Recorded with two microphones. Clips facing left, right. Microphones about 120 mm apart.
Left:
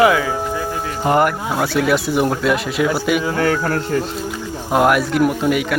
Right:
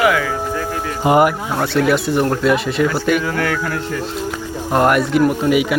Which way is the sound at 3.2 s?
25° left (ahead or behind).